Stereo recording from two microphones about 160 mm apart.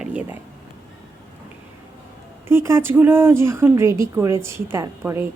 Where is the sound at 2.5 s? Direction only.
15° right (ahead or behind).